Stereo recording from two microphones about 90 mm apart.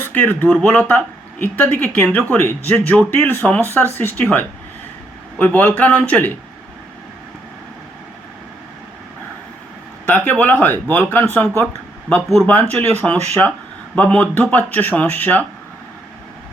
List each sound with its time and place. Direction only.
0.0 s speech: 20° left (ahead or behind)
3.2 s speech: 25° left (ahead or behind)
3.4 s speech: 15° left (ahead or behind)
10.1 s speech: 15° left (ahead or behind)